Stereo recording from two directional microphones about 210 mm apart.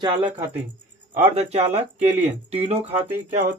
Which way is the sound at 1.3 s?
30° right (ahead or behind).